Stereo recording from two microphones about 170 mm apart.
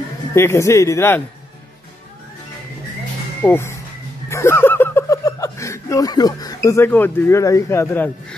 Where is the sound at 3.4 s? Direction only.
15° left (ahead or behind).